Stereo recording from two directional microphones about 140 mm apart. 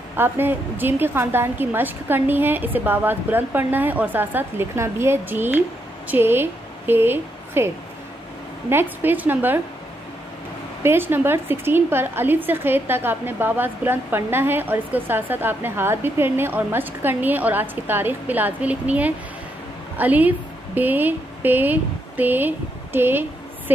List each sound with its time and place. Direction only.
0.1 s a woman's voice: 15° right (ahead or behind)
10.8 s a woman's voice: 15° right (ahead or behind)